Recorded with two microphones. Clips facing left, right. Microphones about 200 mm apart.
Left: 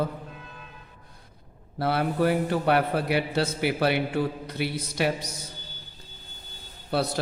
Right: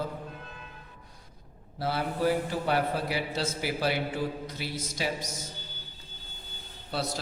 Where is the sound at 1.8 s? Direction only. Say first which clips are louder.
Left 5 dB; 60° left (ahead or behind).